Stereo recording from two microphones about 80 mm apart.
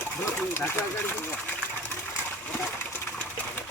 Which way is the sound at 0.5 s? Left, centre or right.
Left.